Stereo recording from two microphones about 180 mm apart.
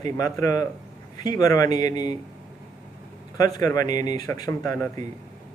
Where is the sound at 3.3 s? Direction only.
20° left (ahead or behind).